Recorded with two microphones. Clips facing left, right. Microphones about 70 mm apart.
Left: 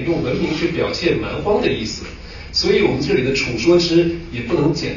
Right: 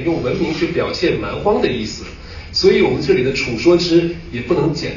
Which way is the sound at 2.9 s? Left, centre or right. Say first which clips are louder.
Right 2 dB; right.